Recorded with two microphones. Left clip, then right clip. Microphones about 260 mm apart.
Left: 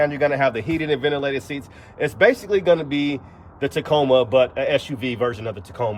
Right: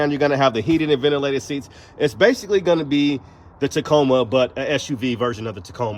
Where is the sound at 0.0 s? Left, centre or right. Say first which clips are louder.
Right 1 dB; centre.